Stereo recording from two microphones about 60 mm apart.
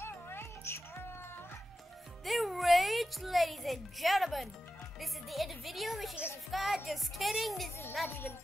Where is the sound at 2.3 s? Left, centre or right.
Centre.